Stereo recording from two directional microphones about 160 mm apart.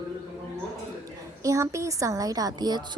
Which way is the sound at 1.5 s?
20° right (ahead or behind).